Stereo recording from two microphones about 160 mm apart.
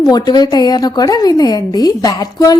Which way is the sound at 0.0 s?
25° left (ahead or behind).